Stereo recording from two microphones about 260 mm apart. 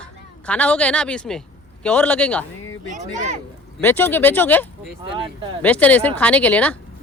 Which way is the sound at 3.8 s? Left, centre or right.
Centre.